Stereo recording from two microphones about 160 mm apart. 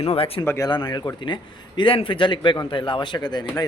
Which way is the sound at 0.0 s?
35° left (ahead or behind).